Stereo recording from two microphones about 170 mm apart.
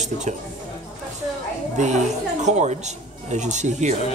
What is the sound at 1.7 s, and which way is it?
Speech, 45° right (ahead or behind).